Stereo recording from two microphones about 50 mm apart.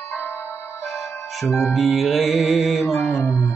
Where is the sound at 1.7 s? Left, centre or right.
Centre.